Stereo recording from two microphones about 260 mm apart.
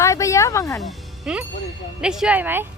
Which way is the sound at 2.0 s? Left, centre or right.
Centre.